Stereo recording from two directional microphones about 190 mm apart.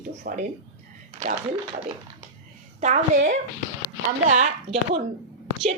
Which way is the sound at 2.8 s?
40° right (ahead or behind).